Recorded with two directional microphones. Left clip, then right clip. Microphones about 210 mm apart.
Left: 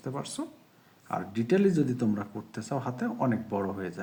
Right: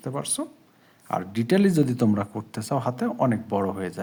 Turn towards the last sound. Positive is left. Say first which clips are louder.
# right 6 dB
turn(degrees=-40)  # may be behind; listen again after turning